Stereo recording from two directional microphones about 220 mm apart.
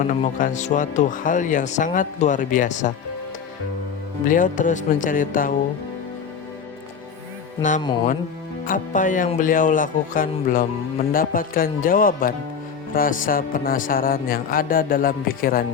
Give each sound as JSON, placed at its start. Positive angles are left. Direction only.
{"t": 0.0, "sound": "speech", "side_deg": 35}
{"t": 4.3, "sound": "speech", "side_deg": 35}
{"t": 8.6, "sound": "speech", "side_deg": 35}